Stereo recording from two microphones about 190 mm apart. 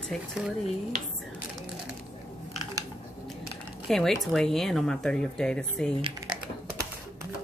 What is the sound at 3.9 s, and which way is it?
Speech, centre (ahead or behind).